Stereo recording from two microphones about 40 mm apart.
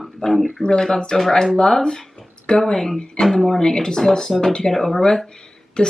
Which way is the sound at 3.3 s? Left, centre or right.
Centre.